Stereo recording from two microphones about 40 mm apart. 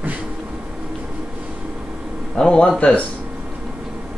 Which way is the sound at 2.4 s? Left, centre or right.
Centre.